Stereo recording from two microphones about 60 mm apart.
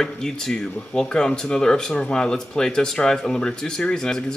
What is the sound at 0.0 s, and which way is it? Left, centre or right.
Speech, centre.